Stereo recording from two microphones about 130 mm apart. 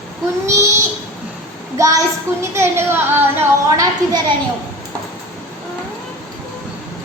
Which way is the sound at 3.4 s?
20° right (ahead or behind).